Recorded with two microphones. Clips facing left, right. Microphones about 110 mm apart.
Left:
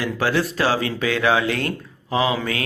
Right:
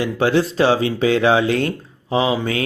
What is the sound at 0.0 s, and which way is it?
Speech, 25° right (ahead or behind).